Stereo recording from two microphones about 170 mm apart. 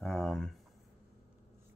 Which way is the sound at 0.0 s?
5° left (ahead or behind).